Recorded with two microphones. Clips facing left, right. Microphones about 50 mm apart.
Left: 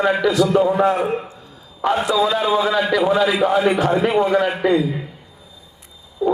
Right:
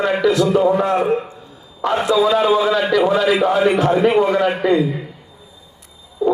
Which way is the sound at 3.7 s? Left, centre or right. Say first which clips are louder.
Right 2 dB; centre.